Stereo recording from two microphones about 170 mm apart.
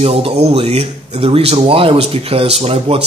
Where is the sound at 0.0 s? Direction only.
35° right (ahead or behind).